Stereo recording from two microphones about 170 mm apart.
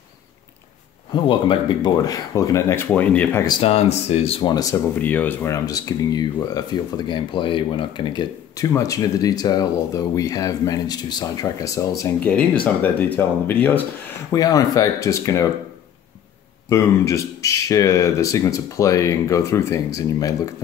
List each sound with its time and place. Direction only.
1.1 s speech: 30° left (ahead or behind); by 3.4 s 10° left (ahead or behind)
3.4 s speech: 30° left (ahead or behind)
4.9 s speech: 10° left (ahead or behind)
14.3 s speech: 20° left (ahead or behind)
16.6 s speech: 15° left (ahead or behind)